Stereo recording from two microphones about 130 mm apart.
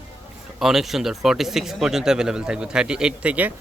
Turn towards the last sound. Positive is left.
turn(degrees=-10)  # may be behind; listen again after turning